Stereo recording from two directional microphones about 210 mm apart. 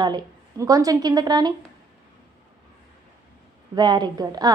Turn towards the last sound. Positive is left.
turn(degrees=-20)  # may be behind; listen again after turning